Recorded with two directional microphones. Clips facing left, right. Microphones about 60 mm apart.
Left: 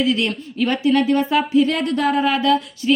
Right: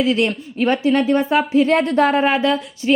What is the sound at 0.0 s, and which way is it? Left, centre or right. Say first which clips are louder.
Speech: right 2 dB; right.